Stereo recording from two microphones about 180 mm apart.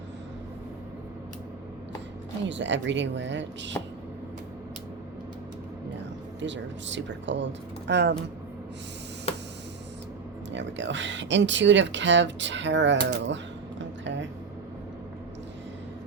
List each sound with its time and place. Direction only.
2.5 s speech: 90° right
6.4 s speech: 90° right
7.9 s speech: 70° right (ahead or behind)
9.3 s a sound: 35° left (ahead or behind)
10.5 s speech: 90° right
13.2 s a sound: 85° right